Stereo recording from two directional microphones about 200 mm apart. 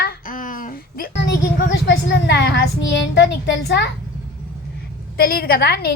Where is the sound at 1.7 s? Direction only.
65° left (ahead or behind).